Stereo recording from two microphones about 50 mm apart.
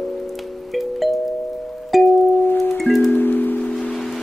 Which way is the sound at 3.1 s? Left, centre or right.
Left.